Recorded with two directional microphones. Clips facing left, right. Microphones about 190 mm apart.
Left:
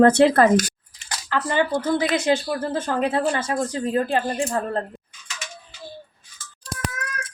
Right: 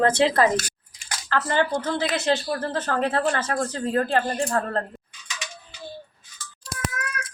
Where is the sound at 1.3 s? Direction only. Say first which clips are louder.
Left 1 dB; 15° left (ahead or behind).